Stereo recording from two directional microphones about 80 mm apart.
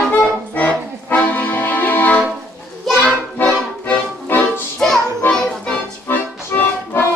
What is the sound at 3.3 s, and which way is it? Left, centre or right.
Music, left.